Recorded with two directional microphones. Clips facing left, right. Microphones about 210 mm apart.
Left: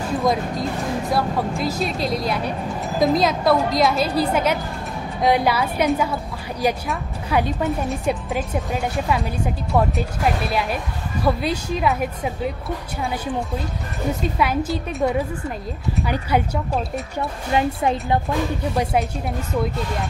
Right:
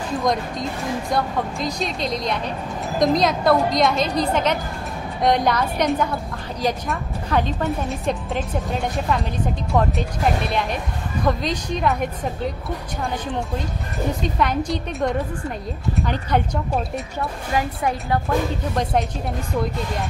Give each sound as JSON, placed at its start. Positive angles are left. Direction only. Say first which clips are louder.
{"t": 0.2, "sound": "a woman's voice", "louder": "left 1 dB", "side_deg": 0}
{"t": 14.2, "sound": "speech", "louder": "left 1 dB", "side_deg": 5}
{"t": 17.6, "sound": "a woman's voice", "louder": "left 3 dB", "side_deg": 25}